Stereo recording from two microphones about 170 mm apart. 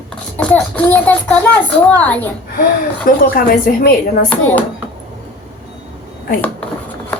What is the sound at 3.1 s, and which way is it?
Speech, 60° left (ahead or behind).